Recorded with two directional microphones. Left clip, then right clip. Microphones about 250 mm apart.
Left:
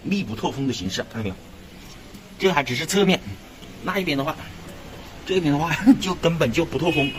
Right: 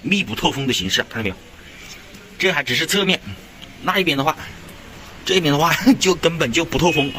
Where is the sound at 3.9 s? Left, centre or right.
Right.